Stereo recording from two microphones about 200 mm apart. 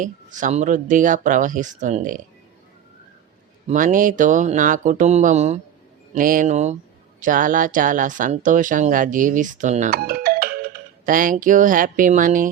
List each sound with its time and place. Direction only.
0.0 s speech: 40° right (ahead or behind)
3.7 s speech: 40° right (ahead or behind)